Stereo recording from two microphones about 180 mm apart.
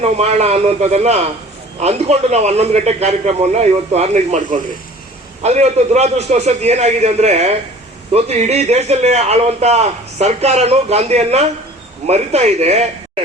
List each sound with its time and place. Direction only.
0.0 s a man's voice: 35° right (ahead or behind)